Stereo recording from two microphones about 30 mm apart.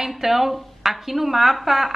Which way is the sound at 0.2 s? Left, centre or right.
Centre.